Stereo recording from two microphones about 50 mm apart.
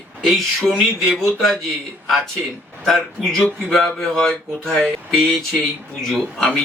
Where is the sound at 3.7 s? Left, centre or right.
Centre.